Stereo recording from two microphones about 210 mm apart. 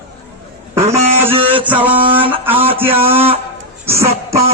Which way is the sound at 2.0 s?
25° right (ahead or behind).